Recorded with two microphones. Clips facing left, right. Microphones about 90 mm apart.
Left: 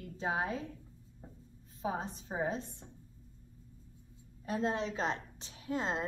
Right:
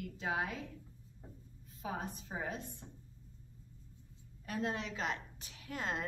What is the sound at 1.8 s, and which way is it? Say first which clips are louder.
A woman's voice: left 4 dB; 25° left (ahead or behind).